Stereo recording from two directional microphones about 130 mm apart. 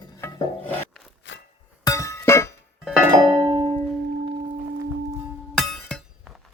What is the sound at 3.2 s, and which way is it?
Music, 35° right (ahead or behind).